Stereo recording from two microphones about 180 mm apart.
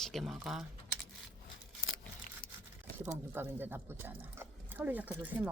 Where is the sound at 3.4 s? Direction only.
10° right (ahead or behind).